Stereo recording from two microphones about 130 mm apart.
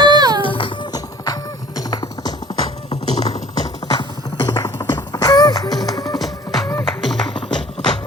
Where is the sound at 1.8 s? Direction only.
30° left (ahead or behind).